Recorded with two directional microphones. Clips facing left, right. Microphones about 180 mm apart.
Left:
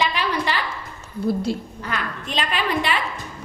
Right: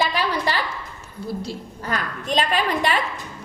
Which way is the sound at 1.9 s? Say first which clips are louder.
Right 3 dB; 40° right (ahead or behind).